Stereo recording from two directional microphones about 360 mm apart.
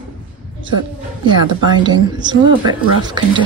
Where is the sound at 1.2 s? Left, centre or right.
Centre.